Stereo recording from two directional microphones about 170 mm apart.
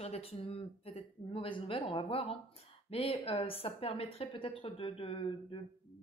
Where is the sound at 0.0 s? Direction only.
35° left (ahead or behind).